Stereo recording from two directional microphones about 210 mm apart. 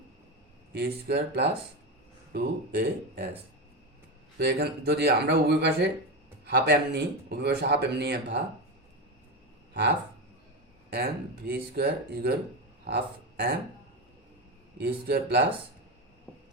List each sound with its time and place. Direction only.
0.7 s speech: 50° right (ahead or behind)
4.4 s speech: 50° right (ahead or behind)
11.4 s speech: 45° right (ahead or behind)
14.8 s speech: 50° right (ahead or behind)